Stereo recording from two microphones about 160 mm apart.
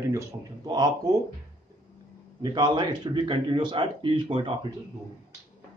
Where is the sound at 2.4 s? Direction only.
30° right (ahead or behind).